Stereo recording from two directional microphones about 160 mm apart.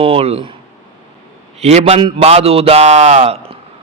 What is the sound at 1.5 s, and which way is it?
A man's voice, 40° right (ahead or behind).